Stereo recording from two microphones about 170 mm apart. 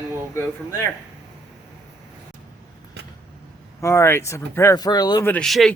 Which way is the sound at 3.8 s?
15° left (ahead or behind).